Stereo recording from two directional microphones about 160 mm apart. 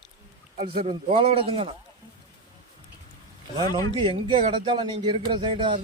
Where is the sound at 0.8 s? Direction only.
35° right (ahead or behind).